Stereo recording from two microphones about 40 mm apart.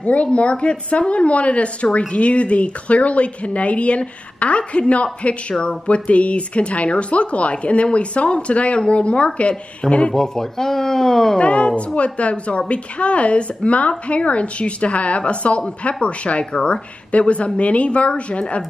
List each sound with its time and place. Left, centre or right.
0.0 s speech: left
10.1 s speech: centre
11.3 s speech: left